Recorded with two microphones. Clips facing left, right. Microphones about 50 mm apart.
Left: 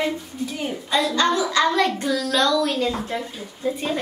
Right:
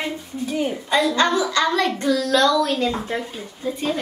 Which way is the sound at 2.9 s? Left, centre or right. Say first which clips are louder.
Right 1 dB; right.